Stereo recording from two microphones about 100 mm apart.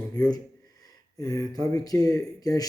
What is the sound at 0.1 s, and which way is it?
Speech, 40° left (ahead or behind).